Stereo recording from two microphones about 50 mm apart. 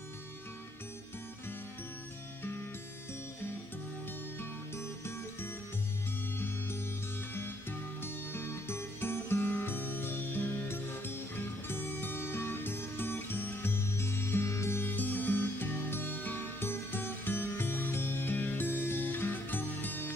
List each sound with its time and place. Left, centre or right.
4.4 s music: left
8.0 s music: left
14.8 s music: left